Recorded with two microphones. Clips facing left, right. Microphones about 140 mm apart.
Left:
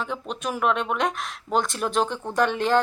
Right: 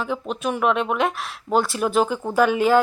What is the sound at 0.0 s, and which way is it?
Speech, centre (ahead or behind).